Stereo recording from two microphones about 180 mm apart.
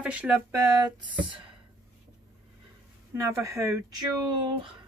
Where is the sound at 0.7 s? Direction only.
25° right (ahead or behind).